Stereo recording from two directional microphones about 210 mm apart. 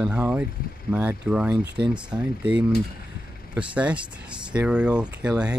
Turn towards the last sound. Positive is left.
turn(degrees=-5)  # may be behind; listen again after turning